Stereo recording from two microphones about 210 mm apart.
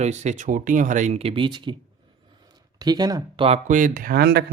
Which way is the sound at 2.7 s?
20° right (ahead or behind).